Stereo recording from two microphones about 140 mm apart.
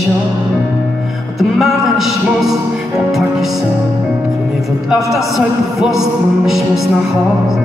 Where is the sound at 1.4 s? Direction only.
Centre (ahead or behind).